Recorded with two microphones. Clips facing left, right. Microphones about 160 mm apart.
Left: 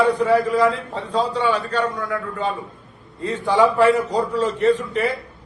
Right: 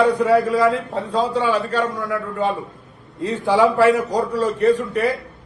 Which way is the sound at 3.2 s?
Centre (ahead or behind).